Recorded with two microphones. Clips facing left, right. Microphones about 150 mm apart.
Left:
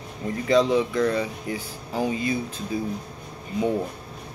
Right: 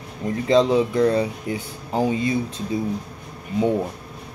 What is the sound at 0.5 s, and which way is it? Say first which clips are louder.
Speech: right 3 dB; 25° right (ahead or behind).